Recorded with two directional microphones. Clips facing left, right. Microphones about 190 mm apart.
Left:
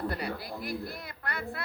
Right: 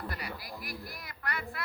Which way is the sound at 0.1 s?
30° left (ahead or behind).